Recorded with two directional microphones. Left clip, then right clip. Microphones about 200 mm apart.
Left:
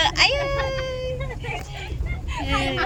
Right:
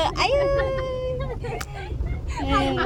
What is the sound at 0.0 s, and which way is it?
Baby cry, 35° right (ahead or behind).